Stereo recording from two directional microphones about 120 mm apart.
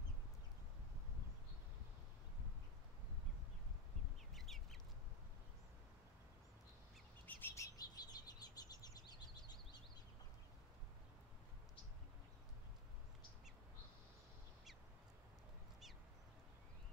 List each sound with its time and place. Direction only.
4.3 s chicken: centre (ahead or behind)
7.2 s bird: 15° left (ahead or behind); by 9.3 s 35° left (ahead or behind)